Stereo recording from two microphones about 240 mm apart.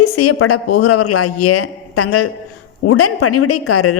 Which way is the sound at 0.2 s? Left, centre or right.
Left.